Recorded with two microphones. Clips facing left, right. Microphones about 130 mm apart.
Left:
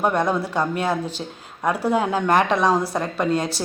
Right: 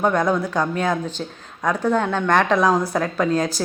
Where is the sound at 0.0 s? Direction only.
5° left (ahead or behind).